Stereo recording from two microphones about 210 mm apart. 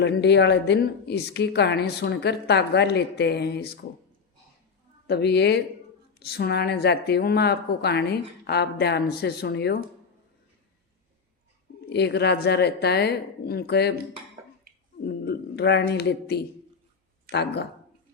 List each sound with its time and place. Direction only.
0.0 s a woman's voice: 55° left (ahead or behind)
5.0 s a woman's voice: 50° left (ahead or behind)
11.9 s a woman's voice: 50° left (ahead or behind)
15.0 s speech: 50° left (ahead or behind)